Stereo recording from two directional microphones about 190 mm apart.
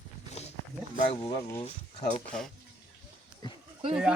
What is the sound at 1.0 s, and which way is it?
Speech, 25° left (ahead or behind).